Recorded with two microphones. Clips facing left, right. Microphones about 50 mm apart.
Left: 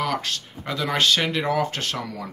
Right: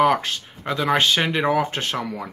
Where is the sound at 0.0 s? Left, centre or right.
Right.